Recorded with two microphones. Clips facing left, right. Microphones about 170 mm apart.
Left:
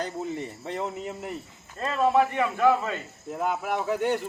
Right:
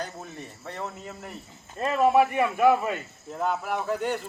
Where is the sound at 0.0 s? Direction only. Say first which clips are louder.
Left 6 dB; 20° left (ahead or behind).